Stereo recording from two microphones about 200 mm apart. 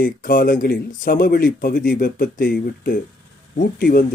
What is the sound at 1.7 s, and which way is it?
Speech, 40° left (ahead or behind).